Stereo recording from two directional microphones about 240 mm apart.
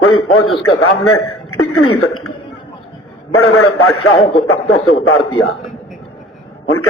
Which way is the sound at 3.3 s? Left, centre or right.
Left.